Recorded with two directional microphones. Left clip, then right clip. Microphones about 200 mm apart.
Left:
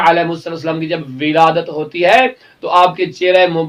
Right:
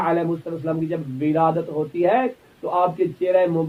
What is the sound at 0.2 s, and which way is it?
Speech, 10° left (ahead or behind).